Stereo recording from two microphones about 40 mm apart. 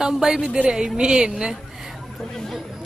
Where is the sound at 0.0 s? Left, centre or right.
Centre.